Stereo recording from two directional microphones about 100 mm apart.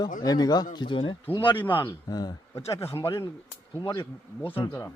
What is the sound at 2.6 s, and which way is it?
Speech, 30° left (ahead or behind).